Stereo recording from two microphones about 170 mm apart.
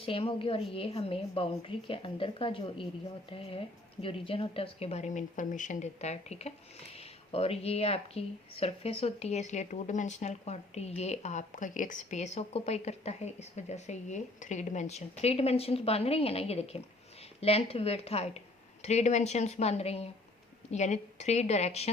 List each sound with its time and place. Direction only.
0.0 s speech: 35° left (ahead or behind)